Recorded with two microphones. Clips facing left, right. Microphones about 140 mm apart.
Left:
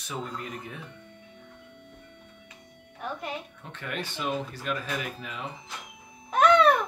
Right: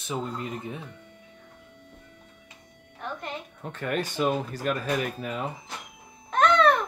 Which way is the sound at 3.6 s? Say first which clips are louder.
Right 6 dB; 45° right (ahead or behind).